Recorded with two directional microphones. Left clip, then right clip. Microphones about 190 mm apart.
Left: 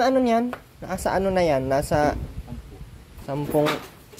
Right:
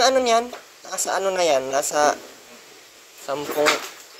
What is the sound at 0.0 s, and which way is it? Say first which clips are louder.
Speech: right 3 dB; 20° left (ahead or behind).